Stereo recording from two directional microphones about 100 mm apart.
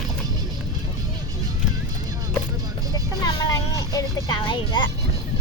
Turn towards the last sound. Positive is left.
turn(degrees=50)  # may be behind; listen again after turning